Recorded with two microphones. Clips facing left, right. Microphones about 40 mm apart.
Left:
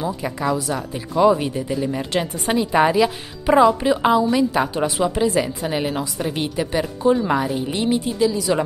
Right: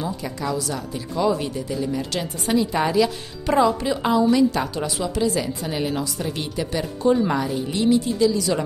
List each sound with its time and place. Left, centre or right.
0.0 s a woman's voice: left